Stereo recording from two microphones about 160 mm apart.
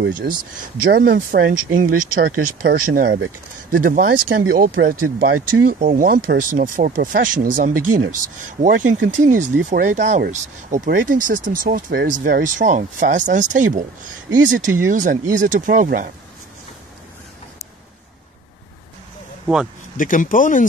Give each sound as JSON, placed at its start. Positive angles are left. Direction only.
{"t": 0.0, "sound": "speech", "side_deg": -75}
{"t": 9.2, "sound": "speech", "side_deg": -50}
{"t": 12.1, "sound": "speech", "side_deg": -60}
{"t": 14.9, "sound": "speech", "side_deg": -55}
{"t": 19.4, "sound": "speech", "side_deg": -5}
{"t": 20.0, "sound": "speech", "side_deg": 55}